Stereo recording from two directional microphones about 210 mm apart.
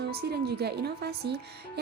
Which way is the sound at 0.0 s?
50° right (ahead or behind).